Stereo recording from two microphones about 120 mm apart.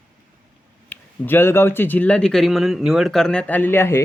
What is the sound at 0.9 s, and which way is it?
Speech, 15° left (ahead or behind).